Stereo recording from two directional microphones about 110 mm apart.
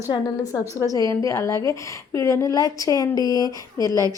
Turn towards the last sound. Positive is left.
turn(degrees=30)  # may be behind; listen again after turning